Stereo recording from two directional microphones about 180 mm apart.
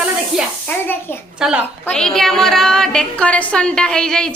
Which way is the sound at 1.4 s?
5° right (ahead or behind).